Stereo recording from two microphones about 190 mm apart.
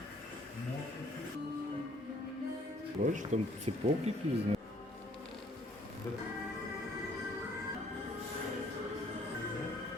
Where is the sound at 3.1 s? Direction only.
40° right (ahead or behind).